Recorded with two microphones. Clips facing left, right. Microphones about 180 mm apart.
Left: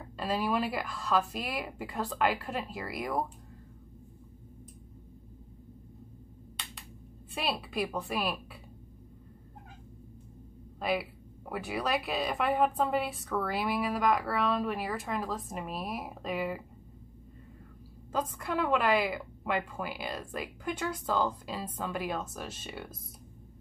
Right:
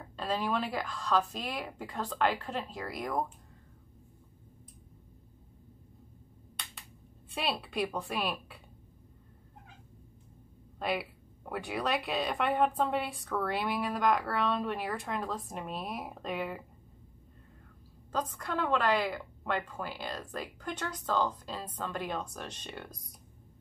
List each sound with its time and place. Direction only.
0.0 s speech: 5° left (ahead or behind)
7.3 s speech: centre (ahead or behind)
10.8 s speech: centre (ahead or behind)
18.1 s a woman's voice: 10° left (ahead or behind)